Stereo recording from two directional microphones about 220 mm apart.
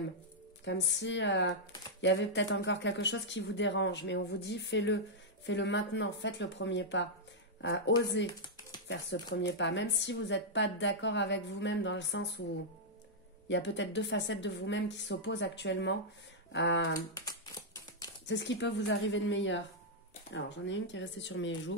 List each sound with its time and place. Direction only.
0.7 s speech: 55° left (ahead or behind)
13.5 s speech: 55° left (ahead or behind)
18.2 s speech: 55° left (ahead or behind)